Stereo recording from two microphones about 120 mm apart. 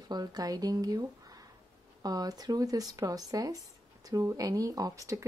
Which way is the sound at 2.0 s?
30° right (ahead or behind).